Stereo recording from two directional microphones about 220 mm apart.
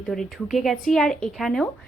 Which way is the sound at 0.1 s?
Centre (ahead or behind).